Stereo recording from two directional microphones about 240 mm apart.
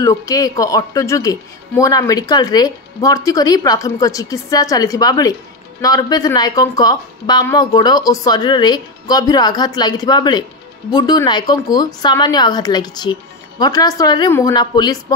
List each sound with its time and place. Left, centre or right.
0.0 s a woman's voice: centre